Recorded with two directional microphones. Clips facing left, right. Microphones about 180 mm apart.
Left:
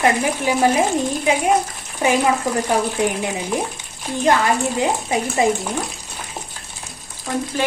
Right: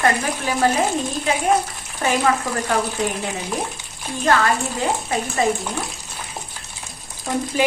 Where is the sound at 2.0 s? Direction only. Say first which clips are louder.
Left 3 dB; 15° left (ahead or behind).